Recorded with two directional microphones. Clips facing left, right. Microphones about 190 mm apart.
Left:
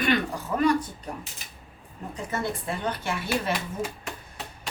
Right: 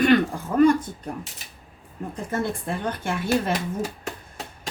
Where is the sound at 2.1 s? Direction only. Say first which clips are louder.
Right 3 dB; 50° right (ahead or behind).